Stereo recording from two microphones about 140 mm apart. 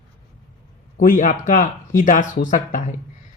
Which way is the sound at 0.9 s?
75° left (ahead or behind).